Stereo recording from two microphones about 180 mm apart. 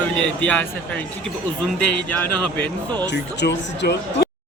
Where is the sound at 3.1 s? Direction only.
75° left (ahead or behind).